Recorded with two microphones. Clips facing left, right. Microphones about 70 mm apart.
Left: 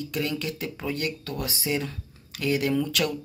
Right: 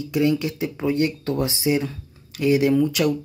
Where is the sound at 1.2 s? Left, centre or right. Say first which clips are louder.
Right 9 dB; right.